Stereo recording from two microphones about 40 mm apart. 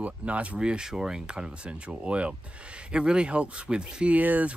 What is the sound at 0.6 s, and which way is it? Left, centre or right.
Speech, right.